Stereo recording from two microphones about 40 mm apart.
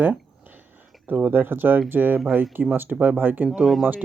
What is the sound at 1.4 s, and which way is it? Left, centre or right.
Speech, right.